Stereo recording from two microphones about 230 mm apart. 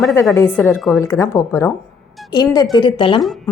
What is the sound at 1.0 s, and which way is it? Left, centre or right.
Speech, centre.